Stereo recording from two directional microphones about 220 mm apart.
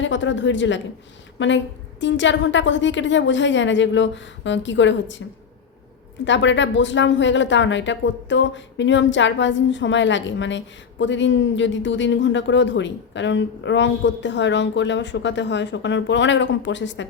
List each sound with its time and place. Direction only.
0.0 s speech: 55° left (ahead or behind)
6.2 s speech: 55° left (ahead or behind)